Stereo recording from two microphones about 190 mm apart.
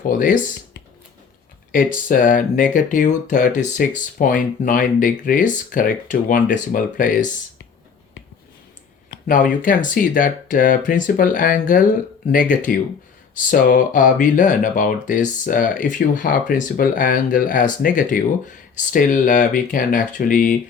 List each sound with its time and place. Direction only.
2.0 s speech: 45° left (ahead or behind)
9.0 s speech: 50° left (ahead or behind)